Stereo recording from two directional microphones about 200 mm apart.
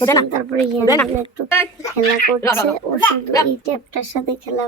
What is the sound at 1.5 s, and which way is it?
Speech, 10° left (ahead or behind).